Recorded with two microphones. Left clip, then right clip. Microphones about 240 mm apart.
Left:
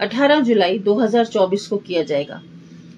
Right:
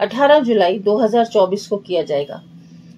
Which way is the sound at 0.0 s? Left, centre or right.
Right.